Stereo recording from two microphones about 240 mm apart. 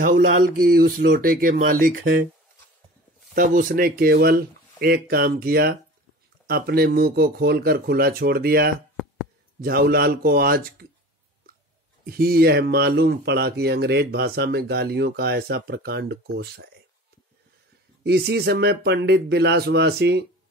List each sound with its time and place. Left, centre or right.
0.0 s speech: right
3.3 s speech: right
12.1 s speech: right
18.0 s speech: right